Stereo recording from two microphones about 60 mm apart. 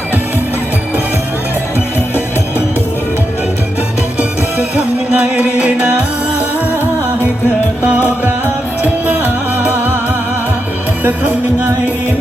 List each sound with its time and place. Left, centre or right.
4.2 s music: right
8.8 s music: right
11.0 s music: right